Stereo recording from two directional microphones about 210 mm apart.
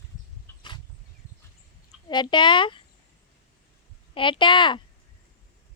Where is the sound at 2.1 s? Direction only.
20° left (ahead or behind).